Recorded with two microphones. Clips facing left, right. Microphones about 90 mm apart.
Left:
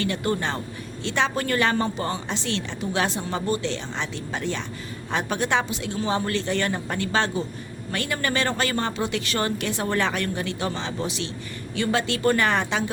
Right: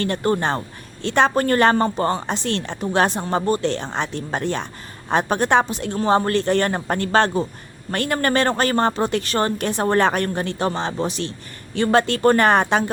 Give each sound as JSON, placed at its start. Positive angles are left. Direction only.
{"t": 0.0, "sound": "a woman's voice", "side_deg": -40}